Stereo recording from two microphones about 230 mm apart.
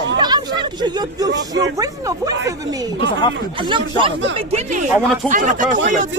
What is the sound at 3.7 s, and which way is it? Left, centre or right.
Speech, right.